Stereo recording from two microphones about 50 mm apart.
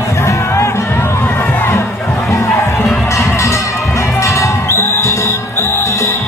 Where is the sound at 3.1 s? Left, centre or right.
Left.